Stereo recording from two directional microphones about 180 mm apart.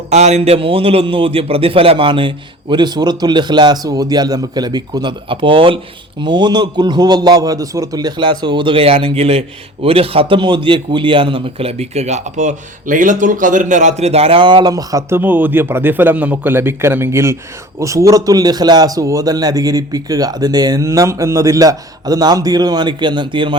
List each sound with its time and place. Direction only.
0.1 s a man's voice: 40° right (ahead or behind)